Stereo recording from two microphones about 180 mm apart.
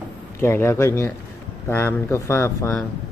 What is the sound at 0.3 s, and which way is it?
Speech, 15° left (ahead or behind).